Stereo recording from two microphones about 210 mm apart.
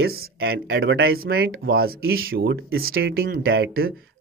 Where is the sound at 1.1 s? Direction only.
45° right (ahead or behind).